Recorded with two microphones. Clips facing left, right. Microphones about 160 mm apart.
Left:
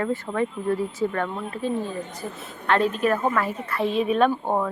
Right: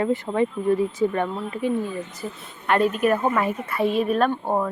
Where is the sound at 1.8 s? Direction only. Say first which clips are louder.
Right 1 dB; 40° left (ahead or behind).